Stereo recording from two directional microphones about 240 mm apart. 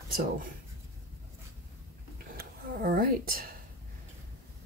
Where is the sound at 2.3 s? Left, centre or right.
Right.